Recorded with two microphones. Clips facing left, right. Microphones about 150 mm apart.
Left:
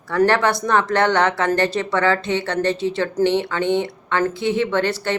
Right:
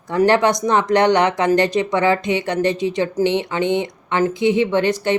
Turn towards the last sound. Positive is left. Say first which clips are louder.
# right 3 dB
turn(degrees=-15)  # may be behind; listen again after turning